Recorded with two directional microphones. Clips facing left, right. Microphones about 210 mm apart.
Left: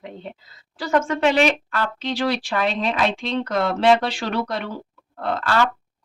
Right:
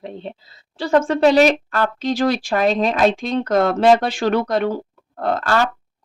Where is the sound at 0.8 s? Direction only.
30° right (ahead or behind).